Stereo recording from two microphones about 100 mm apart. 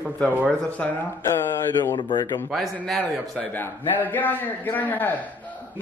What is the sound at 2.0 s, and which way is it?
Speech, 50° left (ahead or behind).